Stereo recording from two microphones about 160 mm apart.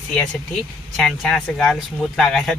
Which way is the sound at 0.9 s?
5° left (ahead or behind).